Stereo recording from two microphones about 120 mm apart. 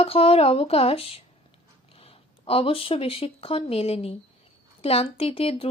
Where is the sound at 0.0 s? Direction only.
55° left (ahead or behind).